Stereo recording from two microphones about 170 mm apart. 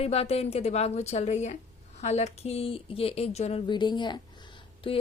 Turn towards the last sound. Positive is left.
turn(degrees=30)  # may be behind; listen again after turning